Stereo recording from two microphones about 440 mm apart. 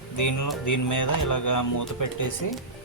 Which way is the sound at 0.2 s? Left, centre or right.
Left.